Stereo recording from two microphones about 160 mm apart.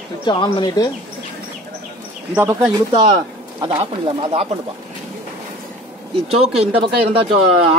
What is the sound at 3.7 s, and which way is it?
Speech, 35° right (ahead or behind).